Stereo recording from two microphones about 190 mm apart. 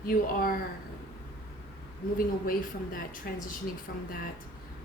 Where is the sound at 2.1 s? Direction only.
50° left (ahead or behind).